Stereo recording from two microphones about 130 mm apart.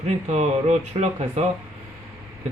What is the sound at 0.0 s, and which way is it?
Speech, 55° right (ahead or behind).